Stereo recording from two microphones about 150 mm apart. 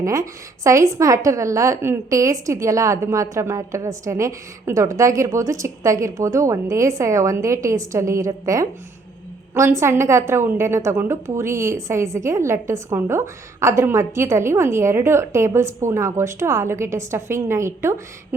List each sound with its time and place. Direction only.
0.0 s a woman's voice: 20° right (ahead or behind)